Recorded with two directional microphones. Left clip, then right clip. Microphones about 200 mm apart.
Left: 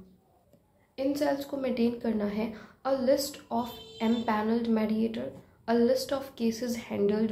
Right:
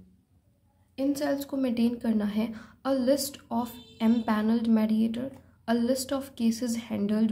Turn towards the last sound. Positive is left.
turn(degrees=-40)  # may be behind; listen again after turning